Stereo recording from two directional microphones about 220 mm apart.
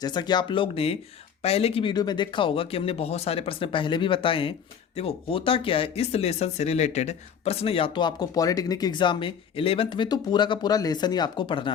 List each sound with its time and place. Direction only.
0.0 s speech: 20° left (ahead or behind)